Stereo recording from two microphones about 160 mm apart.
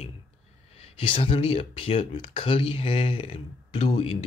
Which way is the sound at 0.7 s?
35° left (ahead or behind).